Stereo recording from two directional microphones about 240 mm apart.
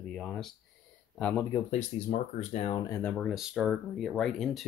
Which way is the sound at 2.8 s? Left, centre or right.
Centre.